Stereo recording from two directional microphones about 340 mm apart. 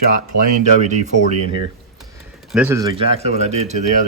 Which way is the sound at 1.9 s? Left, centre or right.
Centre.